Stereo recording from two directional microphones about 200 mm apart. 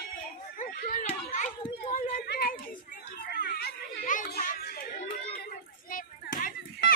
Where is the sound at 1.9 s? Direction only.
50° left (ahead or behind).